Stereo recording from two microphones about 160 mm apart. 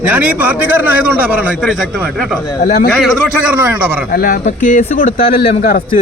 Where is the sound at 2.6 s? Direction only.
60° left (ahead or behind).